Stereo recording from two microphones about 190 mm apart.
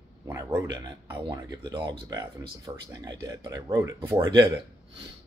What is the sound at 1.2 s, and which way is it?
Speech, 25° right (ahead or behind).